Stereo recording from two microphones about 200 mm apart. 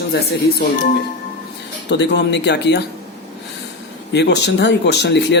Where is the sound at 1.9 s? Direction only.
60° left (ahead or behind).